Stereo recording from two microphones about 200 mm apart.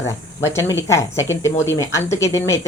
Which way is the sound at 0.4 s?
15° left (ahead or behind).